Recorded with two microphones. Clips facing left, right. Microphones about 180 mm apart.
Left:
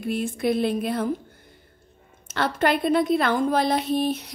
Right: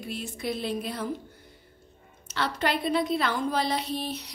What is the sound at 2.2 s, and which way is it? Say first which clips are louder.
A woman's voice: left 6 dB; 50° left (ahead or behind).